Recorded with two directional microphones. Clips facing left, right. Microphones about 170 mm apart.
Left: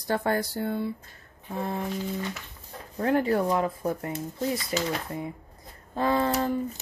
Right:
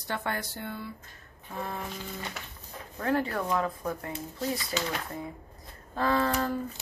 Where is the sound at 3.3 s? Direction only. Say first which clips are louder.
Left 5 dB; 30° left (ahead or behind).